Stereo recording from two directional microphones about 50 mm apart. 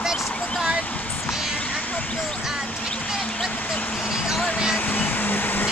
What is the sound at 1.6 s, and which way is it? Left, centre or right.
Vehicle, left.